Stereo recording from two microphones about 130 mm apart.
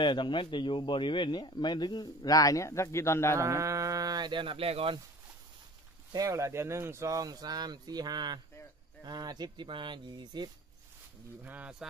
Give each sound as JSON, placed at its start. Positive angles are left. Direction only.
{"t": 0.0, "sound": "speech", "side_deg": 40}
{"t": 3.3, "sound": "speech", "side_deg": -20}
{"t": 6.1, "sound": "speech", "side_deg": -25}
{"t": 11.4, "sound": "speech", "side_deg": -10}